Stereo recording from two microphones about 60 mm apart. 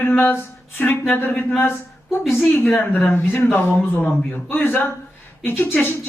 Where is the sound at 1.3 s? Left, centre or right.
Left.